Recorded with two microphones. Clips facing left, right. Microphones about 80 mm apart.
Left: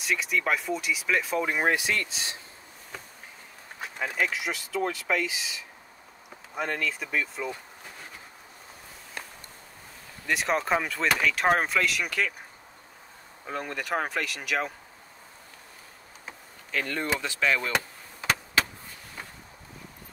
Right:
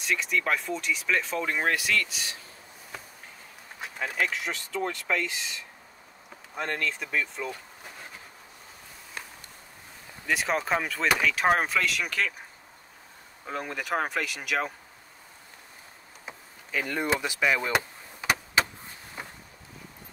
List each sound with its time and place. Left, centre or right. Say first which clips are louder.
0.0 s speech: even; centre; by 2.3 s left
3.8 s speech: left 1 dB; centre
10.2 s speech: left 1 dB; centre
13.5 s speech: even; centre
16.3 s speech: even; centre
17.7 s a sound: right 2 dB; centre